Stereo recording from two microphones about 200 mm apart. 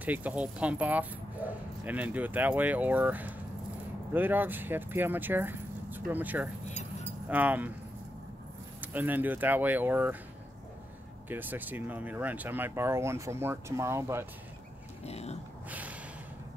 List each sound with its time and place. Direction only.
0.0 s speech: 10° right (ahead or behind)
8.8 s speech: 10° right (ahead or behind)
11.2 s speech: 10° right (ahead or behind)
15.0 s speech: 30° left (ahead or behind)
15.7 s snort: 5° right (ahead or behind)